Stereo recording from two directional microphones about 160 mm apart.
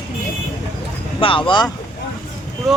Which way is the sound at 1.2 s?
30° left (ahead or behind).